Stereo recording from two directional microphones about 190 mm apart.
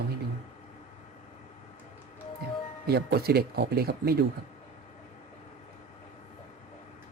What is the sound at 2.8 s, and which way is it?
Speech, 55° right (ahead or behind).